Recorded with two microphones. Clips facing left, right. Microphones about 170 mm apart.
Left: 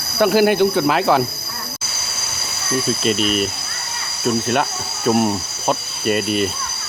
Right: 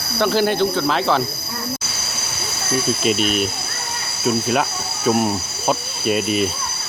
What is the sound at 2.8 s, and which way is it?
Speech, centre (ahead or behind).